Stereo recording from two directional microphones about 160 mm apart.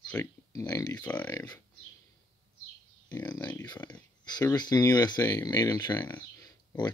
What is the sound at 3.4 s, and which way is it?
Speech, 25° left (ahead or behind).